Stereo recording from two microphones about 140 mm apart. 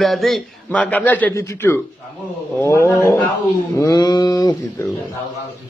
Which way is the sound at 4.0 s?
30° left (ahead or behind).